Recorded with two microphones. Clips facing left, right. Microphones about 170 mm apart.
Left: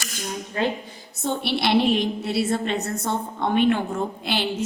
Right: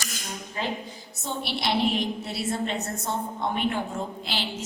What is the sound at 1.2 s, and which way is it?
A woman's voice, 65° left (ahead or behind).